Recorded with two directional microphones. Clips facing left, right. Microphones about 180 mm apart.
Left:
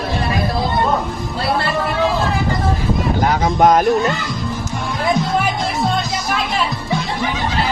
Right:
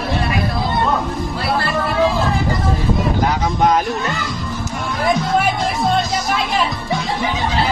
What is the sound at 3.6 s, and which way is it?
Speech, 45° left (ahead or behind).